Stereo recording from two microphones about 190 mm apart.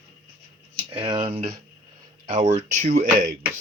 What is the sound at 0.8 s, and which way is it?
Speech, 25° right (ahead or behind).